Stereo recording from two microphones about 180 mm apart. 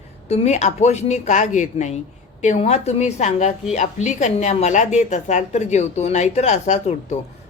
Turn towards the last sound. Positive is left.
turn(degrees=40)  # may be behind; listen again after turning